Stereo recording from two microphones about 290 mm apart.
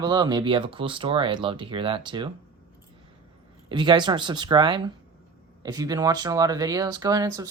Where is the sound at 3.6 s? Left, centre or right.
Centre.